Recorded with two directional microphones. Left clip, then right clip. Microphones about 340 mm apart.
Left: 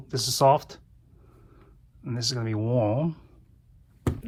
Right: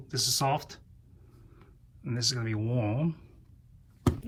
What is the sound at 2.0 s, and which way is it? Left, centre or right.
Speech, centre.